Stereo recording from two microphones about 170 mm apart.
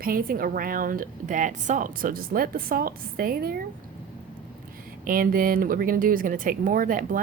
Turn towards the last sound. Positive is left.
turn(degrees=-55)  # may be behind; listen again after turning